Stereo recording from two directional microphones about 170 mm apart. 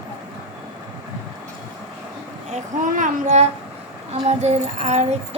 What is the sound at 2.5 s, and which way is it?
Child singing, 45° right (ahead or behind).